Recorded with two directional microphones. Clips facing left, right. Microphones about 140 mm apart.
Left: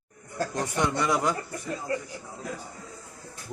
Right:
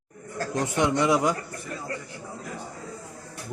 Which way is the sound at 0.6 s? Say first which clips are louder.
Right 4 dB; 20° right (ahead or behind).